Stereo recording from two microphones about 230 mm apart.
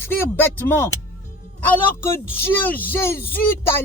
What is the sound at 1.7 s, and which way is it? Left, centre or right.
Speech, centre.